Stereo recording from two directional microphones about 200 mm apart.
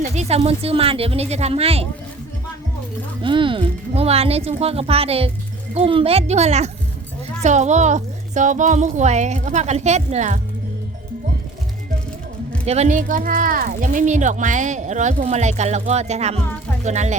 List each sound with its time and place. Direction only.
0.0 s speech: 35° right (ahead or behind)
3.2 s speech: 25° right (ahead or behind)
12.6 s speech: 35° right (ahead or behind)